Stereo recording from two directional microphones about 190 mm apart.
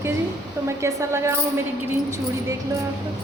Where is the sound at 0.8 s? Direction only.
15° right (ahead or behind).